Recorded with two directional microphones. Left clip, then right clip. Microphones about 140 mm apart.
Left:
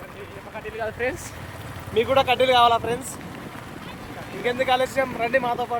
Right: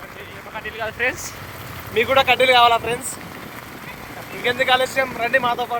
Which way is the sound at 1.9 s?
5° right (ahead or behind).